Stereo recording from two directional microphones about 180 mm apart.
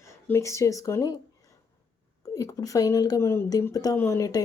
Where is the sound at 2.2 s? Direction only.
20° left (ahead or behind).